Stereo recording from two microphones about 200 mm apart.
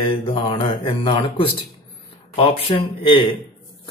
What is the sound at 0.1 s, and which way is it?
Speech, 25° left (ahead or behind).